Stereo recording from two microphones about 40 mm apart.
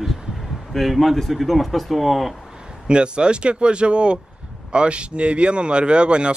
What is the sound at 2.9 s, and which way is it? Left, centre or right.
Speech, right.